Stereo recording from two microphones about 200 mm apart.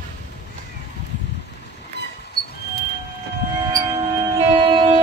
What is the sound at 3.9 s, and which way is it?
Music, 30° right (ahead or behind).